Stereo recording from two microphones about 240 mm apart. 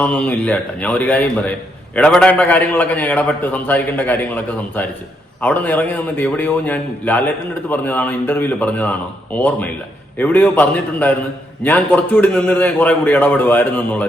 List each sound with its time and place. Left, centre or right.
0.0 s a man's voice: centre